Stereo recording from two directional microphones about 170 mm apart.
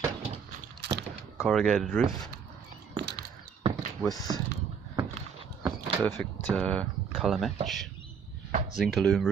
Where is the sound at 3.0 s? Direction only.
70° right (ahead or behind).